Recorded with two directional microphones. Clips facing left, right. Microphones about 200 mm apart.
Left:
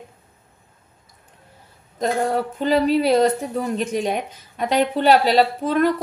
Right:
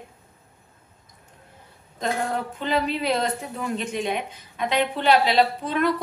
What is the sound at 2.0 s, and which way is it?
Speech, 40° left (ahead or behind).